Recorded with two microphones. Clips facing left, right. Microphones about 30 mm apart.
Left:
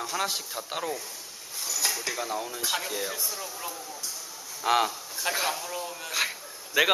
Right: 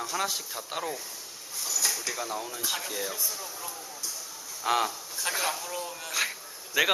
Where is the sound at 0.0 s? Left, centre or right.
Centre.